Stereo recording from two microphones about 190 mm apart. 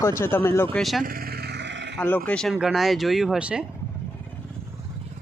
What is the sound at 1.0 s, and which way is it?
Vehicle, 50° right (ahead or behind).